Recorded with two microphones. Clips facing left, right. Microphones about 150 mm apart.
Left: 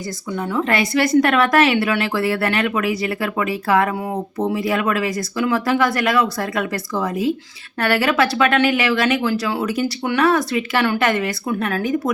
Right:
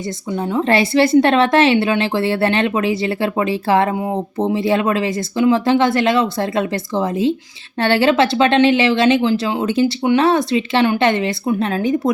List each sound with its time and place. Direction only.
0.3 s a woman's voice: 25° right (ahead or behind)